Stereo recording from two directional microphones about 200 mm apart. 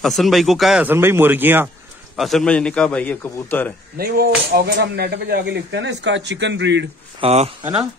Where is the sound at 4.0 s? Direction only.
50° right (ahead or behind).